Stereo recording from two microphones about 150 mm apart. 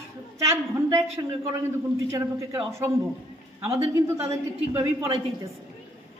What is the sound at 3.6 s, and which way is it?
A man's voice, 20° right (ahead or behind).